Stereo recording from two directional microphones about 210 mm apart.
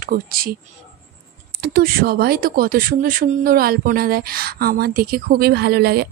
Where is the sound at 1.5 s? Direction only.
45° right (ahead or behind).